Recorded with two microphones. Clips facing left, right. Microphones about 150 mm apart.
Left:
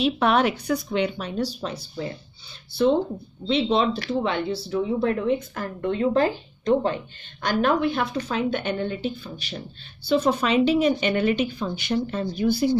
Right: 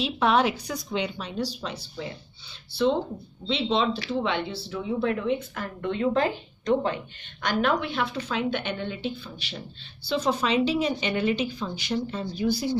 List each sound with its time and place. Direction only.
0.0 s a woman's voice: 55° left (ahead or behind)
3.4 s a woman's voice: 50° left (ahead or behind)